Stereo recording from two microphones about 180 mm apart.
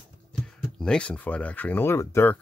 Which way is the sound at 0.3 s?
5° left (ahead or behind).